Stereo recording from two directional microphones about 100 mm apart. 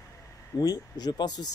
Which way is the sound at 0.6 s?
40° left (ahead or behind).